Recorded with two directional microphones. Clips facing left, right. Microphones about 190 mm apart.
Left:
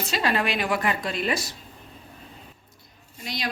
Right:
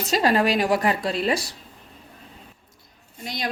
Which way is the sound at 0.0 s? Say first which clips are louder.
Right 5 dB; 40° right (ahead or behind).